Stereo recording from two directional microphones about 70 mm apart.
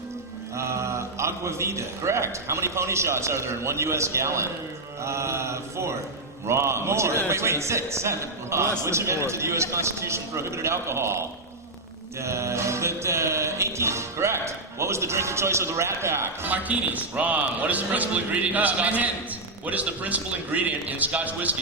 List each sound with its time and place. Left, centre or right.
0.5 s a man's voice: right
5.0 s mantra: right
6.5 s a man's voice: right
12.2 s music: right
16.5 s a man's voice: right